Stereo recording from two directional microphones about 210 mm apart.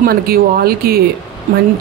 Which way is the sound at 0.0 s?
45° right (ahead or behind).